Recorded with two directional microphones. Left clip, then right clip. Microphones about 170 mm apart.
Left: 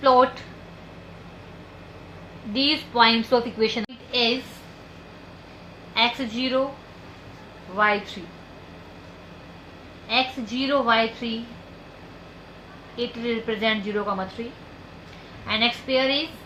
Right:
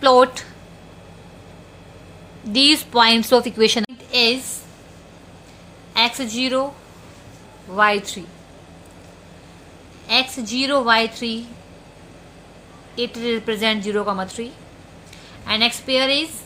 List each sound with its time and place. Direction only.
0.0 s a woman's voice: 85° right
2.5 s a woman's voice: 85° right
5.9 s a woman's voice: 55° right (ahead or behind)
7.8 s a woman's voice: 60° right (ahead or behind)
10.1 s a woman's voice: 60° right (ahead or behind)
13.0 s a woman's voice: 60° right (ahead or behind)
15.4 s a woman's voice: 60° right (ahead or behind)